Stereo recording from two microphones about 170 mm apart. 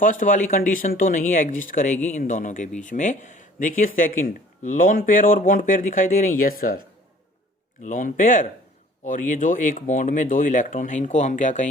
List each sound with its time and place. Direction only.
0.0 s speech: 50° left (ahead or behind)
7.8 s speech: 50° left (ahead or behind)